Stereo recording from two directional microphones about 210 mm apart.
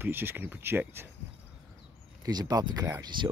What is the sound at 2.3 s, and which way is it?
Speech, 20° right (ahead or behind).